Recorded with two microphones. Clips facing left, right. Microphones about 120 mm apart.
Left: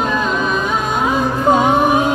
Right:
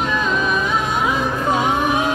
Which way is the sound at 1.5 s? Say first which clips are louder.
Left 6 dB; 35° left (ahead or behind).